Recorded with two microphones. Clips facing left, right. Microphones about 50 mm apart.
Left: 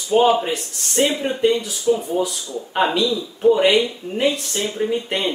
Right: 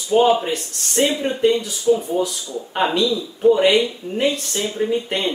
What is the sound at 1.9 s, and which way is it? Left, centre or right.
Speech, left.